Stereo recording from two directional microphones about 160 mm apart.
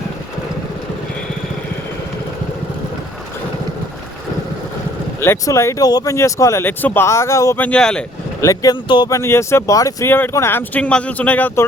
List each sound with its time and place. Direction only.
5.2 s speech: 15° left (ahead or behind)
8.4 s speech: 20° left (ahead or behind)